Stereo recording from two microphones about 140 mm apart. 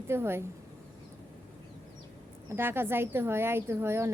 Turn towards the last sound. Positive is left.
turn(degrees=-20)  # may be behind; listen again after turning